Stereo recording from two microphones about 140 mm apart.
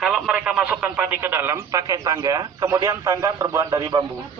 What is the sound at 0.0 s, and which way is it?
Speech, 5° right (ahead or behind).